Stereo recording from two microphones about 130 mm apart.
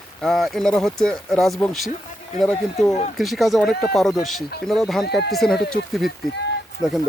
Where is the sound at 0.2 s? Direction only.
Centre (ahead or behind).